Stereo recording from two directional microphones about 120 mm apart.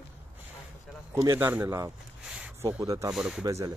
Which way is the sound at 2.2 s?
10° right (ahead or behind).